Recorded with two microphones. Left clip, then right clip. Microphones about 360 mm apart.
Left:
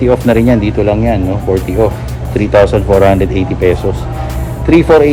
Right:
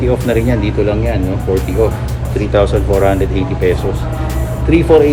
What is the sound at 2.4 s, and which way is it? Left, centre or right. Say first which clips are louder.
Speech: left 5 dB; left.